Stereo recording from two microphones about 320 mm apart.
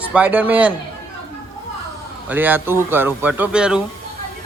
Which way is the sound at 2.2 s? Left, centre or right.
Centre.